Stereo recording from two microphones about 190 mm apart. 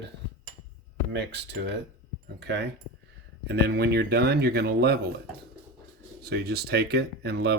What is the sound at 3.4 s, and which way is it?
Speech, 60° right (ahead or behind).